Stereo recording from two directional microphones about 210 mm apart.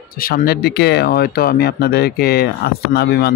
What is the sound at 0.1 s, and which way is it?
Speech, 45° left (ahead or behind).